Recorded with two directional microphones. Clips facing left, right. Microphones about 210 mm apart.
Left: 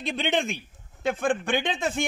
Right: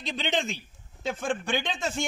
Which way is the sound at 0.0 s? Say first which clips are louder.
Left 3 dB; 55° left (ahead or behind).